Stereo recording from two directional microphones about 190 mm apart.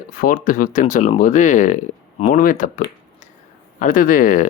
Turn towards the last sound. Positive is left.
turn(degrees=45)  # may be behind; listen again after turning